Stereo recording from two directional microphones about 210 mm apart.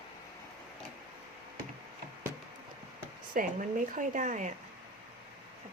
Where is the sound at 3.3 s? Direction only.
40° right (ahead or behind).